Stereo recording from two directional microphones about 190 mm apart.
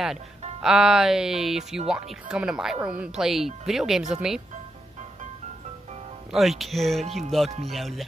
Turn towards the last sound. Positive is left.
turn(degrees=0)  # may be behind; listen again after turning